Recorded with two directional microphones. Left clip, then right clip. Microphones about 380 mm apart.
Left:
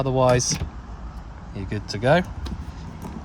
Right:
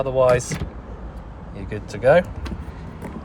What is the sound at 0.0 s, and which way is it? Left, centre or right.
Speech, left.